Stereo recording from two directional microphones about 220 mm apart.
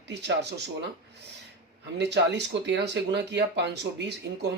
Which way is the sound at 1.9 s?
50° right (ahead or behind).